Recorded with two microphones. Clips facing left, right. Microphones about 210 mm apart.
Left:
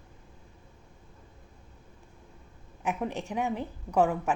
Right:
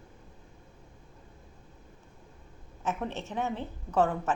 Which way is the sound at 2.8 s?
15° left (ahead or behind).